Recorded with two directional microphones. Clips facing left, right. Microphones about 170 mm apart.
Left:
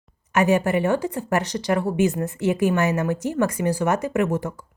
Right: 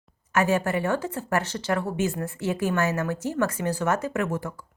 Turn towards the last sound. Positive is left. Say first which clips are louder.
# left 5 dB
turn(degrees=20)  # may be behind; listen again after turning